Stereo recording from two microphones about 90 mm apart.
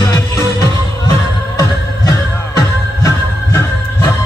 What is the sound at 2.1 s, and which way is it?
Music, 40° left (ahead or behind).